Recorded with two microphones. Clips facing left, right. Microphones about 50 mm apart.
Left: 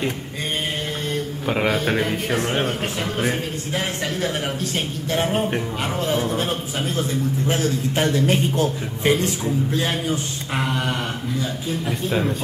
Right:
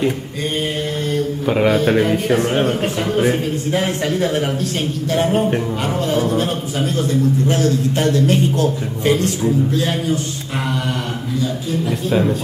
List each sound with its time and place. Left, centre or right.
1.1 s a man's voice: centre
12.1 s a man's voice: centre